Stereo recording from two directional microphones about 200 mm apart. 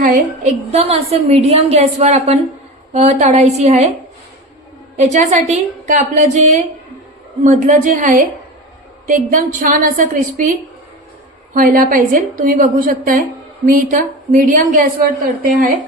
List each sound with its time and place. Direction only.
0.0 s a woman's voice: 45° right (ahead or behind)
0.7 s a woman's voice: 30° right (ahead or behind)
4.9 s a woman's voice: 35° right (ahead or behind)
11.5 s a woman's voice: 45° right (ahead or behind)